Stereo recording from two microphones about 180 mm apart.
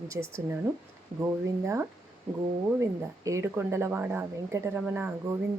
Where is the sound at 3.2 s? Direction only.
15° right (ahead or behind).